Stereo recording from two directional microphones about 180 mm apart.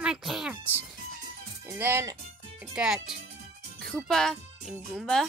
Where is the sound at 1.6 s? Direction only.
15° right (ahead or behind).